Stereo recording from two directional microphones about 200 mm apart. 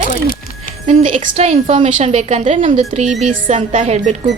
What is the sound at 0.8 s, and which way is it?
A woman's voice, 35° right (ahead or behind).